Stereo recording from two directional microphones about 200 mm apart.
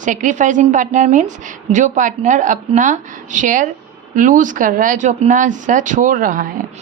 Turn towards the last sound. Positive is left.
turn(degrees=-45)  # may be behind; listen again after turning